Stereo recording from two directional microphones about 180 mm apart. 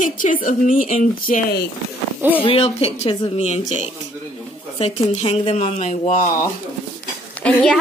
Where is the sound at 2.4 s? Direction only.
30° left (ahead or behind).